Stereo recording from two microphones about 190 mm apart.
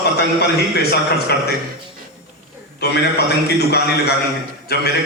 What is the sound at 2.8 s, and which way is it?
A man's voice, 60° left (ahead or behind).